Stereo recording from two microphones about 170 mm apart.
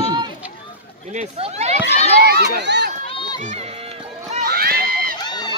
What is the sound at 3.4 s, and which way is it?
Run, 45° right (ahead or behind).